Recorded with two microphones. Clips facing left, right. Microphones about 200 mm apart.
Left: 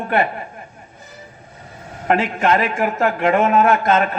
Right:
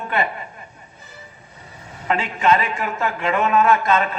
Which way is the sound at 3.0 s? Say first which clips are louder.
Left 5 dB; 60° left (ahead or behind).